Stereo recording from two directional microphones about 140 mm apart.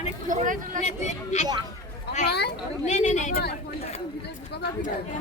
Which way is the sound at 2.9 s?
55° left (ahead or behind).